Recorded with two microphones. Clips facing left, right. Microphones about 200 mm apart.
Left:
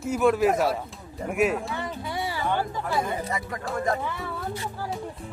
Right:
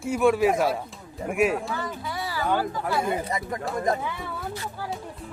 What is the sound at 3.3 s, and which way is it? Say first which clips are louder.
Speech: right 2 dB; 20° right (ahead or behind).